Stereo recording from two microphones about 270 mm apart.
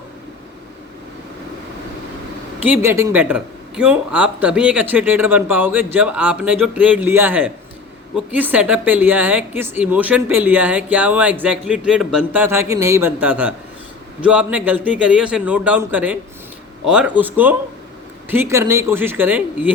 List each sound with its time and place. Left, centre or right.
2.6 s a woman's voice: centre